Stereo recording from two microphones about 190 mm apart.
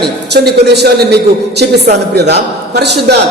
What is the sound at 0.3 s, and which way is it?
A man's voice, 60° right (ahead or behind).